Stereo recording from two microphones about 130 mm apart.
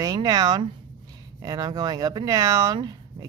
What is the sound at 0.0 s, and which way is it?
Speech, 30° right (ahead or behind).